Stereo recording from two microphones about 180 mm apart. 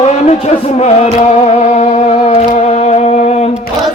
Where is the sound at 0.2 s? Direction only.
35° left (ahead or behind).